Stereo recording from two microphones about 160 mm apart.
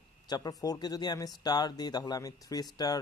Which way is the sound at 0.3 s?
25° left (ahead or behind).